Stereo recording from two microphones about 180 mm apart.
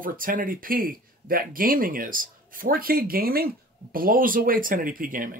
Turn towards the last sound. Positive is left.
turn(degrees=-50)  # may be behind; listen again after turning